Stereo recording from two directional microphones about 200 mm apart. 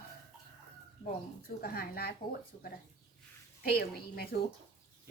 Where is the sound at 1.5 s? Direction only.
50° left (ahead or behind).